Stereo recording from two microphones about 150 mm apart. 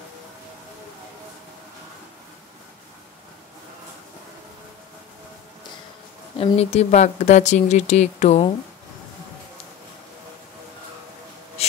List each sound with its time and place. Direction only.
6.3 s speech: 40° left (ahead or behind)